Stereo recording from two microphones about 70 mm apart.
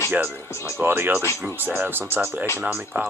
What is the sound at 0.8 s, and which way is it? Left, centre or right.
Speech, right.